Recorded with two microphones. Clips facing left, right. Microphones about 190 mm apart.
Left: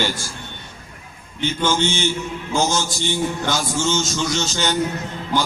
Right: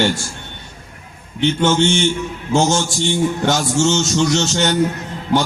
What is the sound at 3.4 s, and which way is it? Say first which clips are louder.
A man's voice: right 6 dB; 70° right (ahead or behind).